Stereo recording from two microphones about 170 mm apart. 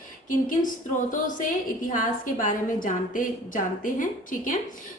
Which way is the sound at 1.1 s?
50° left (ahead or behind).